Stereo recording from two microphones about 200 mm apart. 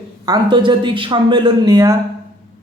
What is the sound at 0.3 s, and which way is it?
A man's voice, 25° right (ahead or behind).